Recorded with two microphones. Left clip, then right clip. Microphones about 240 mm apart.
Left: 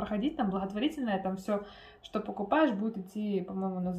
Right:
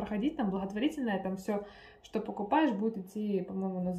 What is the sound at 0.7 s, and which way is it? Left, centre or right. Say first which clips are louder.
Speech: left 1 dB; left.